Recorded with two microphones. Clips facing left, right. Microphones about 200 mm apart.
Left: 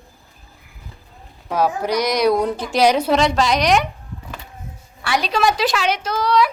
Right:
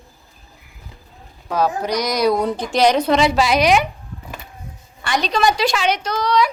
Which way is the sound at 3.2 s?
5° right (ahead or behind).